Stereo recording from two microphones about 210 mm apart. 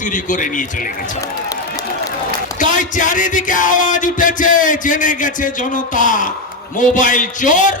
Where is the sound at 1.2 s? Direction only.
15° left (ahead or behind).